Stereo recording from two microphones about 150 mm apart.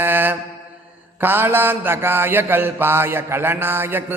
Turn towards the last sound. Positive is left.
turn(degrees=-15)  # may be behind; listen again after turning